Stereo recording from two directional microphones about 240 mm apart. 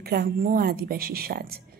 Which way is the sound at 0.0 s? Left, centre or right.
Right.